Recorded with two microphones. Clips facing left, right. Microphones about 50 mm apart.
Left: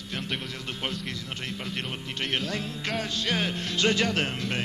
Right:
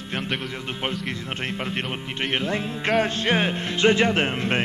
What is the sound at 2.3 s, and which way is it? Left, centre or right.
Music, right.